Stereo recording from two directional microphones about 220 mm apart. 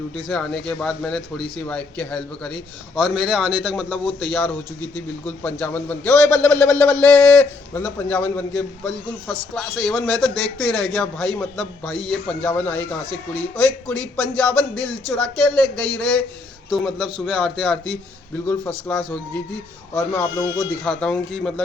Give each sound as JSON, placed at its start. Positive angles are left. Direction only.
{"t": 0.3, "sound": "a man's voice", "side_deg": 5}
{"t": 19.9, "sound": "a man's voice", "side_deg": 15}
{"t": 20.8, "sound": "a man's voice", "side_deg": 5}